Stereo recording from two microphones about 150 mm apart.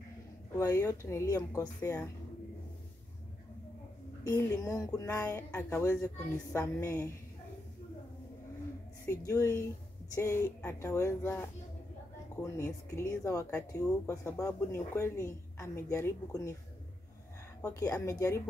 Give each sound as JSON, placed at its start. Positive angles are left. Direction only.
{"t": 0.6, "sound": "a woman's voice", "side_deg": 20}
{"t": 4.2, "sound": "a woman's voice", "side_deg": 20}
{"t": 9.0, "sound": "a woman's voice", "side_deg": 20}
{"t": 17.6, "sound": "a woman's voice", "side_deg": 15}